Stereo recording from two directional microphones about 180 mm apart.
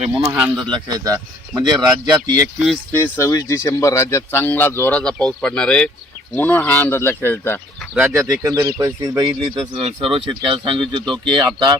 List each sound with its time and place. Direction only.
0.2 s speech: 10° right (ahead or behind)
0.5 s speech: 25° right (ahead or behind)
2.9 s speech: 15° left (ahead or behind)
7.9 s speech: 15° right (ahead or behind)